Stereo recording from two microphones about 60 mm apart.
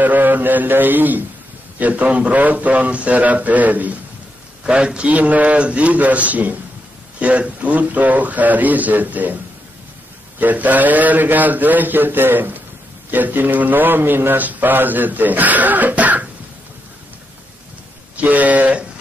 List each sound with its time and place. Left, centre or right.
0.0 s a man's voice: right
4.6 s a man's voice: centre
10.4 s a man's voice: right
18.1 s a sound: right